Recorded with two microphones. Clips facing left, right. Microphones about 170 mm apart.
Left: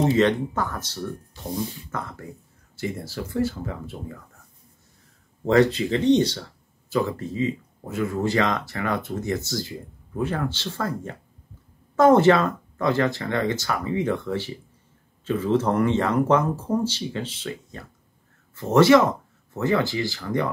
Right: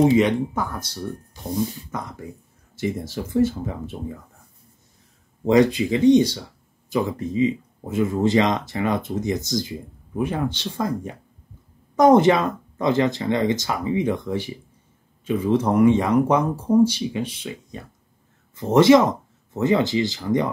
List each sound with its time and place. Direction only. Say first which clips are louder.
0.0 s speech: right 3 dB; 10° right (ahead or behind)
5.4 s speech: right 2 dB; 15° right (ahead or behind)